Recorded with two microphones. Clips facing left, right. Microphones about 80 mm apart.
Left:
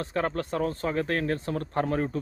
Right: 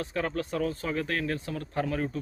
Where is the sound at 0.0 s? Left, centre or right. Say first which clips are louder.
Left 2 dB; left.